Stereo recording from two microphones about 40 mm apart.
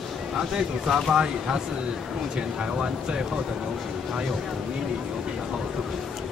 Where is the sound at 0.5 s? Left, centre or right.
Centre.